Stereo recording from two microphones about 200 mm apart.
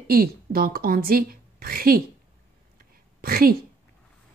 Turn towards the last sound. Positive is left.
turn(degrees=-45)  # may be behind; listen again after turning